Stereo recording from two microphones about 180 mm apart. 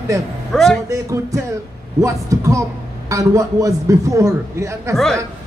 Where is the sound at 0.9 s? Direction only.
15° right (ahead or behind).